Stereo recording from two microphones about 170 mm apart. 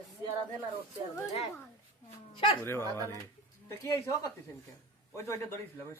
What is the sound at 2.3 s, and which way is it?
Speech, 30° left (ahead or behind).